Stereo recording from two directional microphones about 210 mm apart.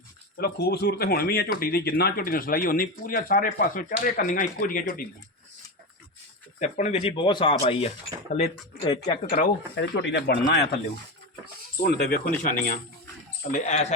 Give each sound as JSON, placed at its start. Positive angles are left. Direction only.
{"t": 0.3, "sound": "speech", "side_deg": 50}
{"t": 6.6, "sound": "speech", "side_deg": 35}
{"t": 9.7, "sound": "speech", "side_deg": 55}
{"t": 11.8, "sound": "speech", "side_deg": 45}